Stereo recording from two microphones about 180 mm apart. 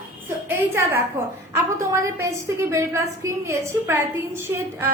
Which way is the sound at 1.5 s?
15° right (ahead or behind).